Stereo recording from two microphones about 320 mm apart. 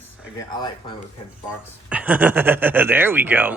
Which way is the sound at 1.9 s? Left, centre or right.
Centre.